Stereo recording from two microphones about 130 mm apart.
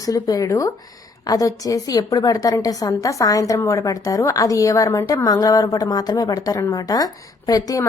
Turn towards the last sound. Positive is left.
turn(degrees=30)  # may be behind; listen again after turning